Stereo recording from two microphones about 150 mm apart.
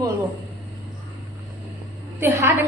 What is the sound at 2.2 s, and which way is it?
Speech, 15° right (ahead or behind).